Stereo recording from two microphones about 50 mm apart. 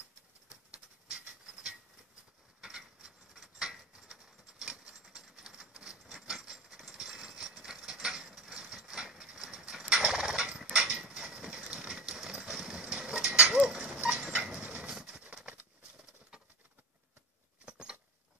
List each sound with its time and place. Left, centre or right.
1.0 s a sound: centre
6.8 s mechanisms: centre
7.1 s ratchet: centre
7.6 s mechanisms: centre
10.6 s a sound: centre
17.6 s rodents: centre